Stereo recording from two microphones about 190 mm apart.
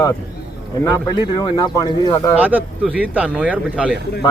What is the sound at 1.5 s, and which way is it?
Speech, 25° left (ahead or behind).